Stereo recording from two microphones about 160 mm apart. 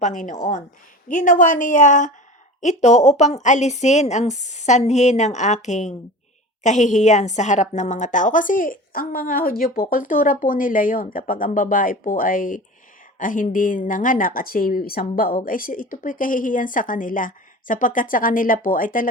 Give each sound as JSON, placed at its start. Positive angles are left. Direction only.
{"t": 0.0, "sound": "a woman's voice", "side_deg": 50}